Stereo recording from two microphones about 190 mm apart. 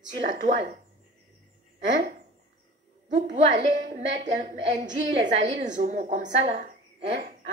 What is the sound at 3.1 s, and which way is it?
A woman's voice, 40° right (ahead or behind).